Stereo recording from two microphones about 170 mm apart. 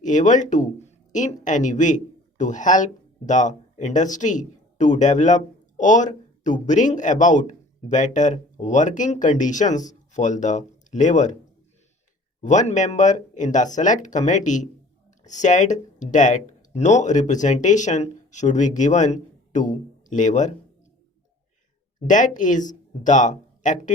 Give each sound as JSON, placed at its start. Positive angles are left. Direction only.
{"t": 0.0, "sound": "speech", "side_deg": 45}
{"t": 12.4, "sound": "speech", "side_deg": 45}
{"t": 22.0, "sound": "speech", "side_deg": 50}